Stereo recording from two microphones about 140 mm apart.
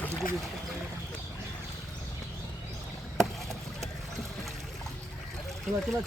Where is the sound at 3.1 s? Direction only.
Centre (ahead or behind).